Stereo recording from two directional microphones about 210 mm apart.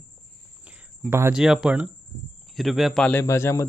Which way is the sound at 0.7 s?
10° right (ahead or behind).